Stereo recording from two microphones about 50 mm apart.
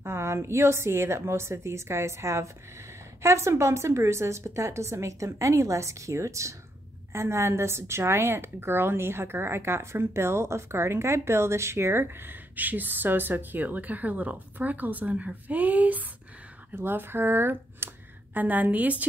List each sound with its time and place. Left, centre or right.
0.0 s a woman's voice: right
7.1 s a woman's voice: right
16.7 s a woman's voice: right
18.3 s a woman's voice: right